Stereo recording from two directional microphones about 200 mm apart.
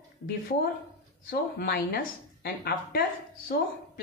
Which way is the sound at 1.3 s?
50° left (ahead or behind).